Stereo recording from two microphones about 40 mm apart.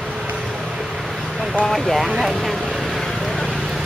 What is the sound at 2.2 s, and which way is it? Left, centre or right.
Vehicle, centre.